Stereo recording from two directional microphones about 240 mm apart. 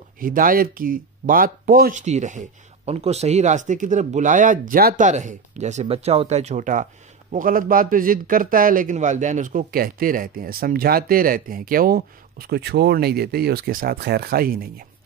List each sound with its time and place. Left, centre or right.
0.2 s speech: right